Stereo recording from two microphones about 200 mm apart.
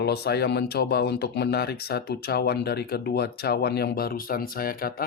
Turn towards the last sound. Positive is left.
turn(degrees=45)  # may be behind; listen again after turning